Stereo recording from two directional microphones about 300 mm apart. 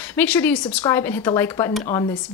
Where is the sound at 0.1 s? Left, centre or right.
Centre.